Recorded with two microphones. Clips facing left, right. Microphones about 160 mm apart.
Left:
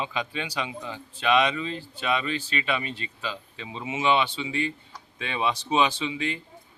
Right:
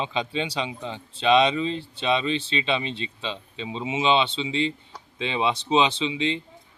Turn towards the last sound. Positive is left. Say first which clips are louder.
# right 4 dB
turn(degrees=-20)  # may be behind; listen again after turning